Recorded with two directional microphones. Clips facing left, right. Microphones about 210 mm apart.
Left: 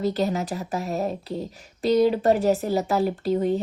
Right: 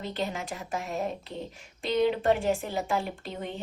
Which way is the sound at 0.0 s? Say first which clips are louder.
Left 9 dB; 40° left (ahead or behind).